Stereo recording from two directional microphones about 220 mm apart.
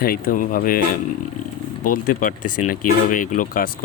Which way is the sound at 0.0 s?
40° left (ahead or behind).